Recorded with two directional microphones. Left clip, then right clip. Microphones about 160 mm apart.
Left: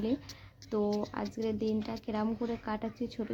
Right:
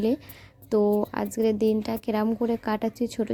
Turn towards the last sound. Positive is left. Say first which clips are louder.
# right 10 dB
turn(degrees=-35)  # may be behind; listen again after turning